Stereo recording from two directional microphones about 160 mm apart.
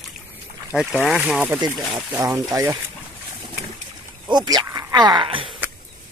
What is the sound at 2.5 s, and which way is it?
Speech, 20° right (ahead or behind).